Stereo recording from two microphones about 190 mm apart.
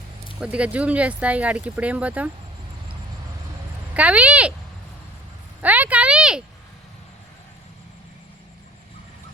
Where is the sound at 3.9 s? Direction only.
5° right (ahead or behind).